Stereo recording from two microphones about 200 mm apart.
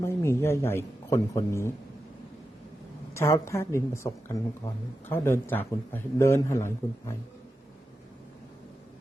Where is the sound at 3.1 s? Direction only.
15° left (ahead or behind).